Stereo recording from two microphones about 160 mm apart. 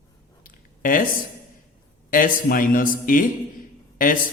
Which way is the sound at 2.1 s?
60° left (ahead or behind).